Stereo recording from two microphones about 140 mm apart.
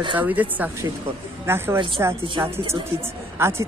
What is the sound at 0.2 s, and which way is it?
A woman's voice, 10° right (ahead or behind).